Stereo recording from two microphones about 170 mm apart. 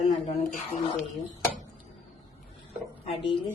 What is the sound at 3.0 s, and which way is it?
Speech, 30° left (ahead or behind).